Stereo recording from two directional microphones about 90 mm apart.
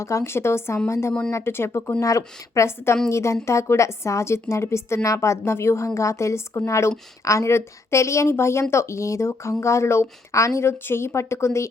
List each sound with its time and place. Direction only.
0.0 s speech: 35° left (ahead or behind)